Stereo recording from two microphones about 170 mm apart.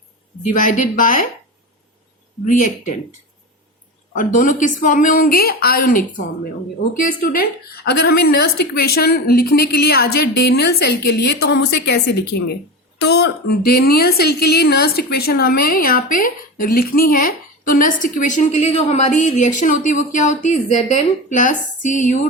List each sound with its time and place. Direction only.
0.4 s a woman's voice: 50° left (ahead or behind)
2.5 s a woman's voice: 45° left (ahead or behind)
4.1 s a woman's voice: 50° left (ahead or behind)
7.9 s a woman's voice: 70° left (ahead or behind); by 22.3 s 45° left (ahead or behind)